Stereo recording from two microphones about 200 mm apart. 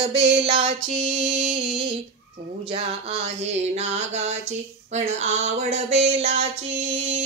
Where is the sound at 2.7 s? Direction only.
30° right (ahead or behind).